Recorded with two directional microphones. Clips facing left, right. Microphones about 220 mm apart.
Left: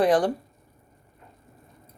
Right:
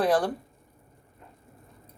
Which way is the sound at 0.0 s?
15° left (ahead or behind).